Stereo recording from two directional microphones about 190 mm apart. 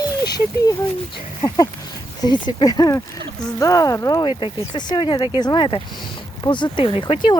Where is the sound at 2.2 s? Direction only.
25° left (ahead or behind).